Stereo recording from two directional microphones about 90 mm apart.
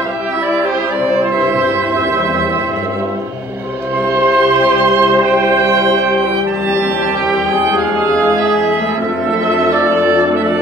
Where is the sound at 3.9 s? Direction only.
25° right (ahead or behind).